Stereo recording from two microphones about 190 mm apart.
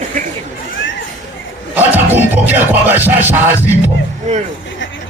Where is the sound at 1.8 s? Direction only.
10° right (ahead or behind).